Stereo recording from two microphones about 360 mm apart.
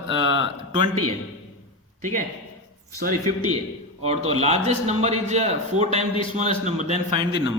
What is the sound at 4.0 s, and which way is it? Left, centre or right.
A man's voice, centre.